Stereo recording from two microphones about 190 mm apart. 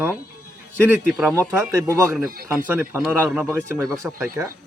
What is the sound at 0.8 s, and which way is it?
A man's voice, 10° right (ahead or behind).